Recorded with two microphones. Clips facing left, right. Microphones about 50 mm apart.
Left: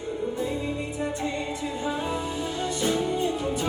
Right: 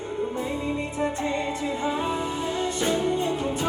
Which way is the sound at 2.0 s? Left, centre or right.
Right.